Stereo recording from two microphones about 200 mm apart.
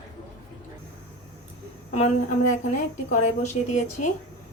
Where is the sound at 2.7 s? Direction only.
40° left (ahead or behind).